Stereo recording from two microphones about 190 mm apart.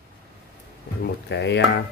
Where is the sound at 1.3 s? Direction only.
65° left (ahead or behind).